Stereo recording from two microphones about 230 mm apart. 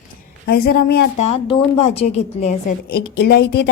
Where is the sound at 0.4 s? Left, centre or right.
Left.